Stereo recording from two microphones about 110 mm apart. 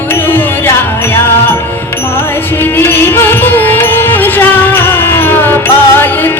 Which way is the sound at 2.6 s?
20° left (ahead or behind).